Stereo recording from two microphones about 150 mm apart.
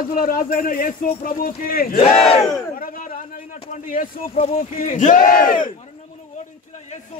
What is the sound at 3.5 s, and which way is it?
Speech, 60° left (ahead or behind).